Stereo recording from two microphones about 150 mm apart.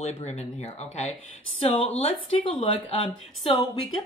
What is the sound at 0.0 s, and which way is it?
A woman's voice, 45° left (ahead or behind).